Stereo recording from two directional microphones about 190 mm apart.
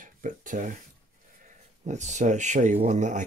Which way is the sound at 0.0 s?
45° right (ahead or behind).